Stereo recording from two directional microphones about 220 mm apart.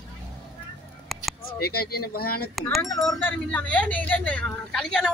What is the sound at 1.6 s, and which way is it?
Speech, 45° left (ahead or behind).